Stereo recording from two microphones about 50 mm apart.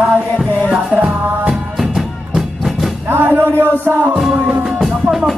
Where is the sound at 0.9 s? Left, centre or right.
Right.